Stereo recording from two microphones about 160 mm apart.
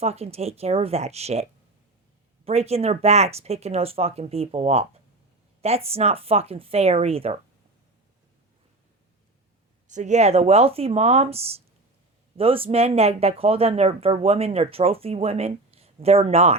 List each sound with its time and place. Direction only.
0.0 s speech: 40° right (ahead or behind)
9.8 s speech: 50° right (ahead or behind)